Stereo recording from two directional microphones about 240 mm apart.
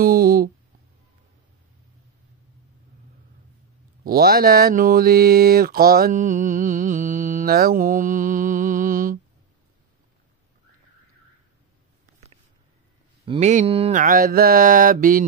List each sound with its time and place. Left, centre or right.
0.0 s a sound: right
4.0 s speech: right
13.2 s speech: right